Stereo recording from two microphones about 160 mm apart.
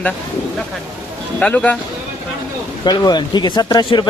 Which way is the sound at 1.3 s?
10° left (ahead or behind).